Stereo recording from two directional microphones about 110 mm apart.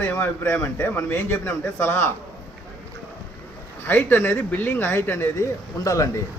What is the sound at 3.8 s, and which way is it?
A man's voice, 20° left (ahead or behind).